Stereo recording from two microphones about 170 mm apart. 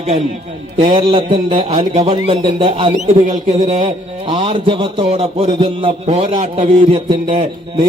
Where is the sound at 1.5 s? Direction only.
40° right (ahead or behind).